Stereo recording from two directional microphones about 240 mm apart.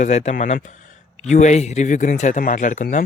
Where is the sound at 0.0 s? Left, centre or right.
Left.